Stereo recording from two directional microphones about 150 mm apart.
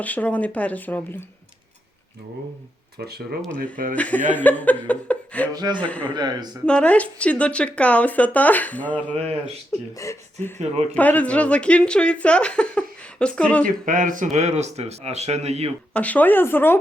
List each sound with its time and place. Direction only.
0.0 s speech: 10° left (ahead or behind)
3.0 s speech: 90° right
3.6 s speech: 65° right (ahead or behind)
3.9 s speech: 10° left (ahead or behind)
6.1 s speech: 30° right (ahead or behind)
6.7 s speech: 10° left (ahead or behind)
9.1 s speech: 45° right (ahead or behind)
10.0 s speech: 20° left (ahead or behind)
13.7 s speech: 60° right (ahead or behind); by 15.7 s 45° right (ahead or behind)
15.9 s speech: 10° left (ahead or behind)